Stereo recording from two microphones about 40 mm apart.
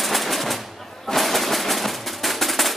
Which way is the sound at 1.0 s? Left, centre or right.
Centre.